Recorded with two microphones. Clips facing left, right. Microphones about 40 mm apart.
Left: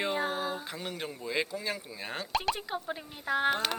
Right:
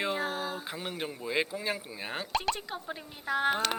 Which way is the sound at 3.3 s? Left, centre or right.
Centre.